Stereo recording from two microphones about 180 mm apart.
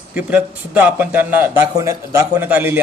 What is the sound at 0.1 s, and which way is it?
Speech, 5° right (ahead or behind).